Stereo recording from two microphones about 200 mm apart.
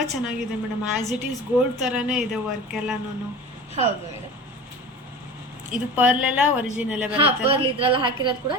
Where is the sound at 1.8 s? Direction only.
5° right (ahead or behind).